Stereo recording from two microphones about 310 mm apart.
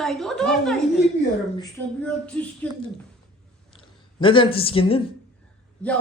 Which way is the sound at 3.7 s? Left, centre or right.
Centre.